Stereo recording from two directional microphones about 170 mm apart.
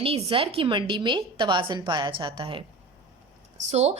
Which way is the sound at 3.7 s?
40° right (ahead or behind).